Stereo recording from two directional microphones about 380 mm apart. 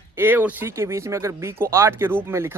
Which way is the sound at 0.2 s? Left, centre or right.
Centre.